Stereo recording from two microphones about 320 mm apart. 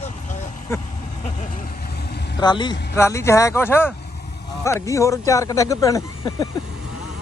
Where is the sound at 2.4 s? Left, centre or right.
Centre.